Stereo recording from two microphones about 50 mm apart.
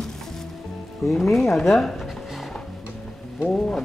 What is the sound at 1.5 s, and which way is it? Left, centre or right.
Music, centre.